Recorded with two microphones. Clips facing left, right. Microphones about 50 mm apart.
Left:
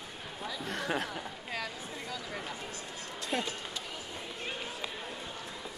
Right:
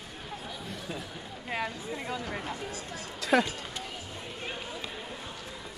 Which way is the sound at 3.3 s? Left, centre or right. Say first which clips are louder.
Right 10 dB; right.